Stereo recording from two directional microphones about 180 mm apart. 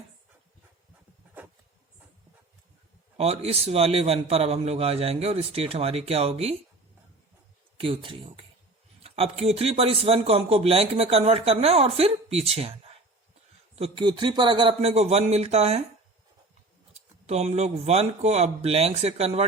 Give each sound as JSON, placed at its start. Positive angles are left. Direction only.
{"t": 3.2, "sound": "speech", "side_deg": -35}
{"t": 7.8, "sound": "speech", "side_deg": -30}
{"t": 16.9, "sound": "speech", "side_deg": -35}